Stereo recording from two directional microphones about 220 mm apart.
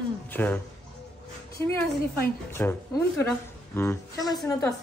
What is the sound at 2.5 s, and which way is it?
Speech, 10° left (ahead or behind).